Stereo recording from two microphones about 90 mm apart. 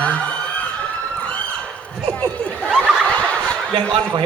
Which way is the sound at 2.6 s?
Centre (ahead or behind).